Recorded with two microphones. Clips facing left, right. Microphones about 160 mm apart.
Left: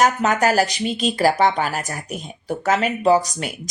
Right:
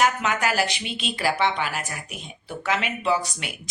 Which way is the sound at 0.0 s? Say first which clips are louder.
Left 5 dB; 40° left (ahead or behind).